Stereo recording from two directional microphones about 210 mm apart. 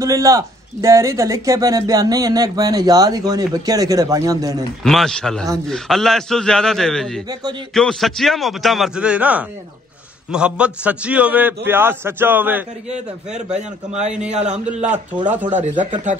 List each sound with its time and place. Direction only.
0.0 s speech: 15° right (ahead or behind)
4.8 s a man's voice: centre (ahead or behind)
14.3 s speech: 35° right (ahead or behind)